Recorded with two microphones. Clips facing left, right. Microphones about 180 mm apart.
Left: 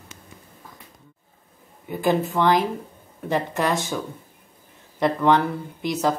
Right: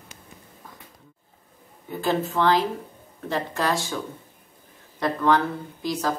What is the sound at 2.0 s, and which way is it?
Speech, 15° left (ahead or behind).